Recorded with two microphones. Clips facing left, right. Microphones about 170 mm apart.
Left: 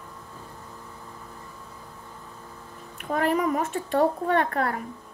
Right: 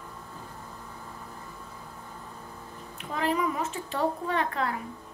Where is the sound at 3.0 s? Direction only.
50° left (ahead or behind).